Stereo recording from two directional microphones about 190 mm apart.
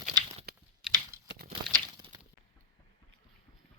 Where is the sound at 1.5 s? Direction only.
25° right (ahead or behind).